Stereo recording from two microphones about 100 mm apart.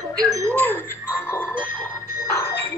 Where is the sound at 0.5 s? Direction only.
20° left (ahead or behind).